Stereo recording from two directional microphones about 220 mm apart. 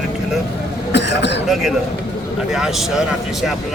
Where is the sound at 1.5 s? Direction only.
Centre (ahead or behind).